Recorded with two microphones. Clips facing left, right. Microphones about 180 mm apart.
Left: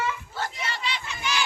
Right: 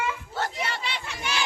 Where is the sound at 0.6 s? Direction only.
60° right (ahead or behind).